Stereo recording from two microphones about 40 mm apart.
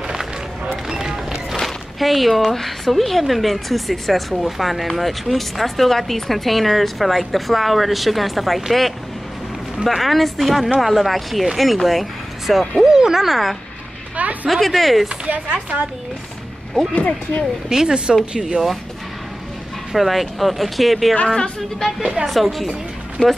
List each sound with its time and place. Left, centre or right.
0.8 s run: centre
1.6 s speech: centre
12.9 s speech: centre
14.1 s a sound: right
14.5 s speech: centre
15.2 s speech: right
16.9 s speech: left
17.6 s speech: centre
19.9 s speech: centre
21.3 s a woman's voice: centre
22.0 s speech: centre